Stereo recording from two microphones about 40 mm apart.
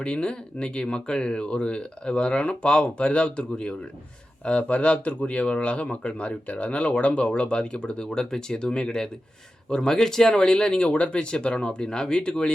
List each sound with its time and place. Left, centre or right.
0.0 s speech: left